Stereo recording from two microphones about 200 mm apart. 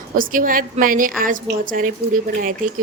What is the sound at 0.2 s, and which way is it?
A woman's voice, 45° right (ahead or behind).